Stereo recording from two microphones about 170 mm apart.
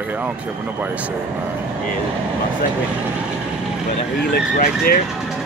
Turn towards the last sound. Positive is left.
turn(degrees=60)  # may be behind; listen again after turning